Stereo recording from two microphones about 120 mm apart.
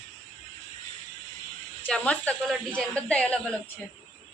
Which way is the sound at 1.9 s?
10° left (ahead or behind).